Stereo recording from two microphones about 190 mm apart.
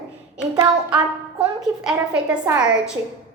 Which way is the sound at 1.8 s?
5° right (ahead or behind).